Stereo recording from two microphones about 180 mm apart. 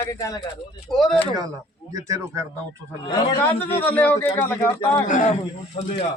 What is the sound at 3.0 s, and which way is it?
A man's voice, 10° left (ahead or behind).